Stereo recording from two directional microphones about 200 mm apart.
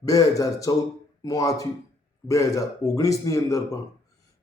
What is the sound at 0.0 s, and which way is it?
Speech, 15° left (ahead or behind).